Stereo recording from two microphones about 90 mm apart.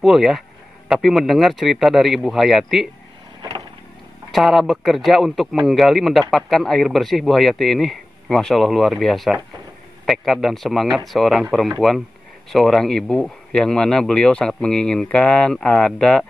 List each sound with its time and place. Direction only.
0.0 s a man's voice: 5° right (ahead or behind)
4.3 s a man's voice: centre (ahead or behind)